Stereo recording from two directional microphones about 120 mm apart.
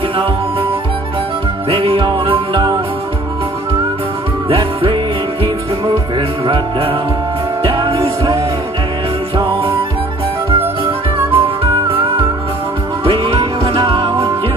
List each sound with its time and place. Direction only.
1.7 s music: 50° right (ahead or behind)
4.5 s music: 45° right (ahead or behind)
6.4 s music: 50° right (ahead or behind)
9.4 s music: 50° right (ahead or behind)
11.3 s music: 50° right (ahead or behind)
13.0 s music: 50° right (ahead or behind)